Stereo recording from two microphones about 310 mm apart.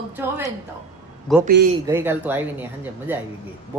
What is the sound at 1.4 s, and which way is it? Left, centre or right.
Speech, right.